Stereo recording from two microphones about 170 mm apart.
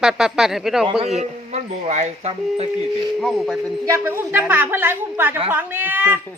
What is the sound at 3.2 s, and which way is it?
Speech, centre (ahead or behind).